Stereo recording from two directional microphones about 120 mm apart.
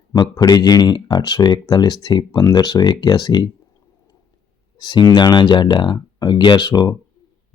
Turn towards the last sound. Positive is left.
turn(degrees=35)  # may be behind; listen again after turning